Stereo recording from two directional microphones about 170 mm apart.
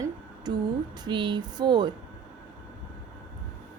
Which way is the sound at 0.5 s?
25° right (ahead or behind).